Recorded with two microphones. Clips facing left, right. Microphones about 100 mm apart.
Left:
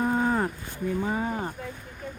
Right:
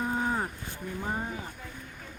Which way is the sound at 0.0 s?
85° left.